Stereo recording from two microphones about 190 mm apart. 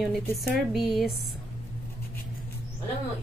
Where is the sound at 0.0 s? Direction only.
Centre (ahead or behind).